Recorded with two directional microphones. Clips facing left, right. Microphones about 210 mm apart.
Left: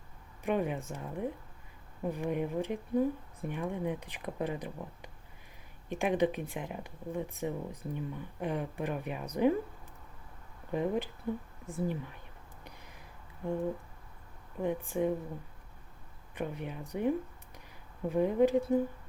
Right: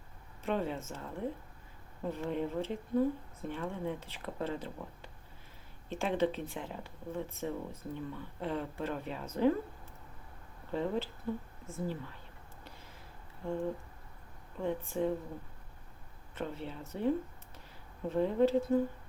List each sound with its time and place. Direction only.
0.4 s speech: 15° left (ahead or behind)
10.7 s speech: 15° left (ahead or behind)
12.6 s a sound: 15° left (ahead or behind)
13.4 s speech: 15° left (ahead or behind)
14.6 s speech: 15° left (ahead or behind)
16.3 s speech: 15° left (ahead or behind)